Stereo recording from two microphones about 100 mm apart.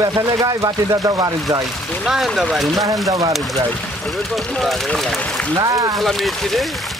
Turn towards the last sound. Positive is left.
turn(degrees=0)  # may be behind; listen again after turning